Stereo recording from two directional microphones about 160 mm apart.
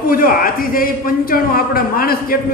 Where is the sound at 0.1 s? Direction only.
60° left (ahead or behind).